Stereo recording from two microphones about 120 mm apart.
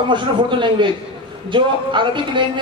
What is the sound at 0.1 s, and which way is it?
A man's voice, 40° right (ahead or behind).